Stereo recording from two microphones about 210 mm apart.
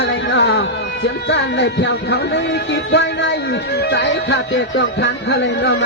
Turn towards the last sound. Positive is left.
turn(degrees=60)  # may be behind; listen again after turning